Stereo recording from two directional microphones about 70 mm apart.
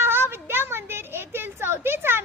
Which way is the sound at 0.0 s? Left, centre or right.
Right.